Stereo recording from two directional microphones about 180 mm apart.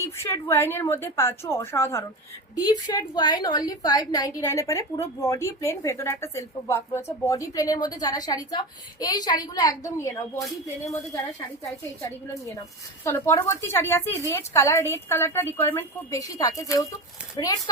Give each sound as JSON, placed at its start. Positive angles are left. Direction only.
{"t": 0.0, "sound": "a woman's voice", "side_deg": 15}
{"t": 13.1, "sound": "a woman's voice", "side_deg": 15}